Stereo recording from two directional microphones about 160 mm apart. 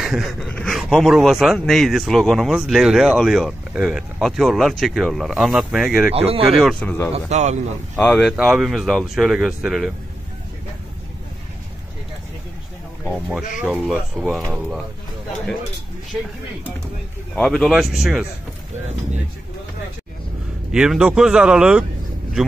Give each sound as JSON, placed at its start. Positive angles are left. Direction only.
{"t": 0.0, "sound": "speech", "side_deg": 0}
{"t": 6.1, "sound": "speech", "side_deg": -40}
{"t": 6.7, "sound": "a man's voice", "side_deg": 10}
{"t": 7.2, "sound": "speech", "side_deg": -45}
{"t": 7.9, "sound": "speech", "side_deg": 5}
{"t": 13.6, "sound": "speech", "side_deg": -5}
{"t": 16.1, "sound": "speech", "side_deg": 5}
{"t": 17.4, "sound": "speech", "side_deg": 0}
{"t": 20.7, "sound": "speech", "side_deg": -5}